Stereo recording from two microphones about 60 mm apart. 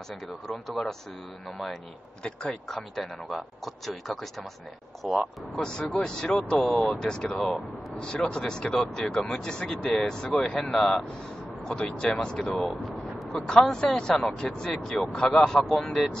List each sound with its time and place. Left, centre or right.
0.5 s speech: centre
2.2 s speech: centre
3.3 s speech: centre
5.7 s speech: centre
6.6 s speech: centre
7.0 s speech: centre